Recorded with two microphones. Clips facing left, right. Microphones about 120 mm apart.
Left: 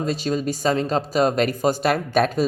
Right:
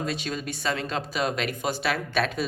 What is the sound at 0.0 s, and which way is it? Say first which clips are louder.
A man's voice: left 7 dB; 40° left (ahead or behind).